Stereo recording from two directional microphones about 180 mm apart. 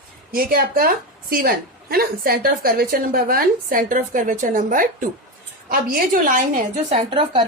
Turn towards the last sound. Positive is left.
turn(degrees=-30)  # may be behind; listen again after turning